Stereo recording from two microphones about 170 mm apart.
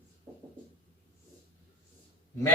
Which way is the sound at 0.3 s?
15° right (ahead or behind).